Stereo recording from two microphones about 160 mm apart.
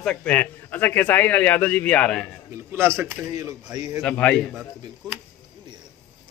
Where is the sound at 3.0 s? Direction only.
25° right (ahead or behind).